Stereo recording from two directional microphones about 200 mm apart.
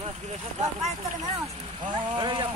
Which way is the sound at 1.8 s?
20° right (ahead or behind).